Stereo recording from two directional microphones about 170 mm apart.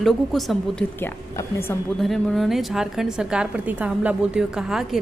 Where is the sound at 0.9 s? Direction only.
15° left (ahead or behind).